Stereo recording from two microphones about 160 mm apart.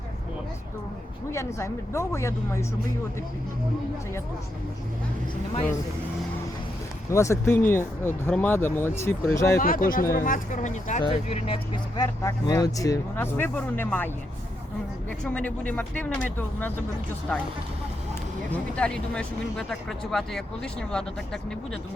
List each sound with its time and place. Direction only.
1.3 s speech: 15° left (ahead or behind)
7.1 s speech: 20° left (ahead or behind)
9.6 s speech: 60° left (ahead or behind)
11.0 s speech: 40° left (ahead or behind)
12.0 s speech: 20° left (ahead or behind)
15.2 s speech: 10° left (ahead or behind)
18.5 s speech: 5° left (ahead or behind)